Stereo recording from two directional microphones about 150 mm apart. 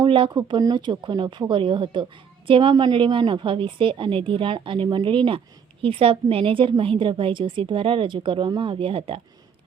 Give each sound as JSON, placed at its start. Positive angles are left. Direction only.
{"t": 0.0, "sound": "a woman's voice", "side_deg": -30}